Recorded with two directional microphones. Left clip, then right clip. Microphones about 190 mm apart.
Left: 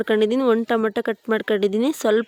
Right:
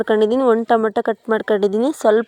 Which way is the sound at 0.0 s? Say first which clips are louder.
Right 4 dB; 25° left (ahead or behind).